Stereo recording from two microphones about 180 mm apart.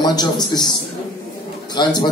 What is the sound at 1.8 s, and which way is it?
Speech, 25° left (ahead or behind).